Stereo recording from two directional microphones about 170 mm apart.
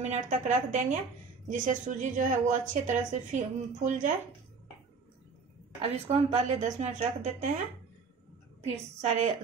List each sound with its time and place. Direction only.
0.0 s a woman's voice: 45° right (ahead or behind)
5.8 s a woman's voice: 40° right (ahead or behind)
9.0 s a woman's voice: 45° right (ahead or behind)